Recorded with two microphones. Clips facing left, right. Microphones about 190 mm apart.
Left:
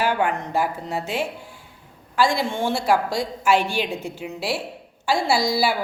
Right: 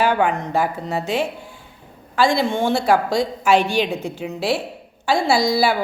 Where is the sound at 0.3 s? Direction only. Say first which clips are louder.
Right 3 dB; 10° left (ahead or behind).